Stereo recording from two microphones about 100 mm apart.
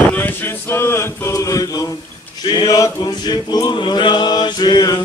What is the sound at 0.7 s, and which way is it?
Chant, 25° left (ahead or behind).